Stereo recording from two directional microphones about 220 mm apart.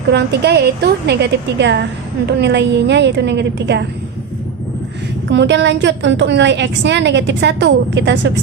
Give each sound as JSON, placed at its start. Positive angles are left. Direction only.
{"t": 0.1, "sound": "a woman's voice", "side_deg": -50}
{"t": 5.3, "sound": "a woman's voice", "side_deg": -55}